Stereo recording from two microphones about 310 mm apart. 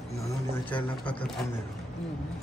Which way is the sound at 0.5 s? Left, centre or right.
Centre.